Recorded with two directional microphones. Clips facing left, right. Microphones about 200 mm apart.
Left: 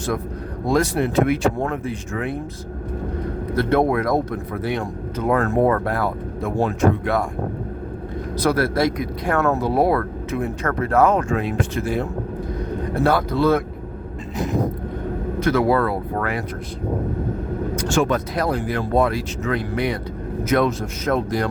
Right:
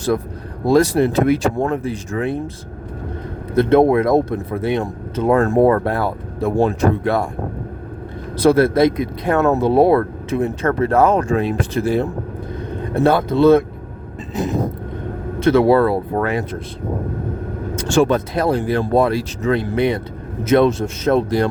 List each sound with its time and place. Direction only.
0.7 s speech: 35° right (ahead or behind)
3.5 s speech: 20° right (ahead or behind)
8.4 s speech: 25° right (ahead or behind)
13.0 s speech: 25° right (ahead or behind)
15.4 s speech: 25° right (ahead or behind)
17.9 s speech: 30° right (ahead or behind)